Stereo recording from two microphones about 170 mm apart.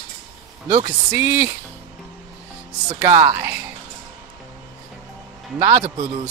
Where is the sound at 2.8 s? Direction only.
20° right (ahead or behind).